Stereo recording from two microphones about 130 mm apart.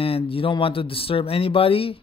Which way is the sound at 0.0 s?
45° left (ahead or behind).